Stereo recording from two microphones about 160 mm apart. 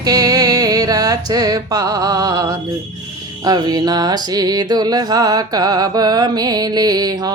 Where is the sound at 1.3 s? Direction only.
25° right (ahead or behind).